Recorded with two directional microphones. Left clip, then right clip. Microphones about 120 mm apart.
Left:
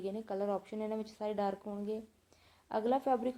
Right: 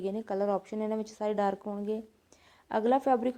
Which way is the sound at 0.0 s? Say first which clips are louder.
Right 6 dB; 35° right (ahead or behind).